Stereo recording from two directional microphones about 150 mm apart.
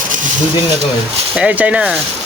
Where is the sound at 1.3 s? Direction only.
10° right (ahead or behind).